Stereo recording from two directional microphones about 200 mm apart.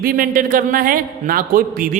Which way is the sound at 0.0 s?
45° right (ahead or behind).